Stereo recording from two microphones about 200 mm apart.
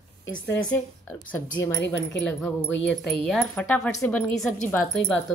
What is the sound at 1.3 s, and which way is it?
Speech, 15° left (ahead or behind).